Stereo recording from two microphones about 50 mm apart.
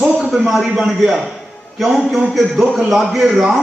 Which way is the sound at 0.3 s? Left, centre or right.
Centre.